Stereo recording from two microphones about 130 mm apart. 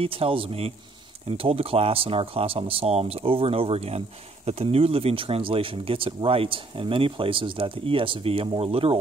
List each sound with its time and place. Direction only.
0.0 s speech: 45° right (ahead or behind)